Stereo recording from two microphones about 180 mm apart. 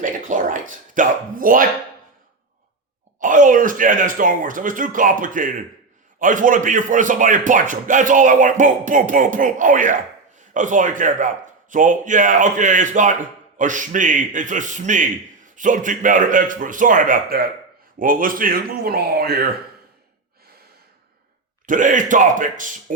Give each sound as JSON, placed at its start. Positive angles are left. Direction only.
{"t": 0.0, "sound": "a sound", "side_deg": -45}
{"t": 3.2, "sound": "speech", "side_deg": -45}
{"t": 21.7, "sound": "speech", "side_deg": -45}